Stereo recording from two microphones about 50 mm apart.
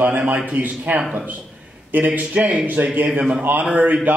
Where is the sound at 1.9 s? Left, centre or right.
Right.